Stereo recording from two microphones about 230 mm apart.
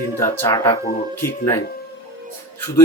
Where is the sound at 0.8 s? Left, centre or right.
Left.